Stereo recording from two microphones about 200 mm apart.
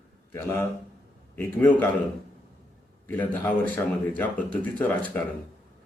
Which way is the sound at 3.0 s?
10° left (ahead or behind).